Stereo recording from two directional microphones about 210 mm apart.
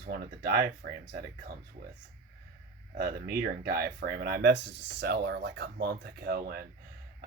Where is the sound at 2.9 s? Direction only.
50° right (ahead or behind).